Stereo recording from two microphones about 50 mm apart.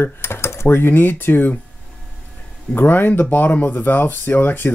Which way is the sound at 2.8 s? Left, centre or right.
Left.